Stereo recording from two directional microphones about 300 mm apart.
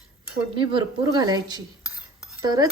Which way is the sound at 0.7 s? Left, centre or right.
Centre.